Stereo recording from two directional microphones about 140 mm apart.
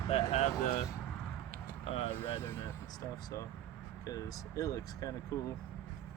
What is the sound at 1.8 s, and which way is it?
Vehicle, 40° left (ahead or behind).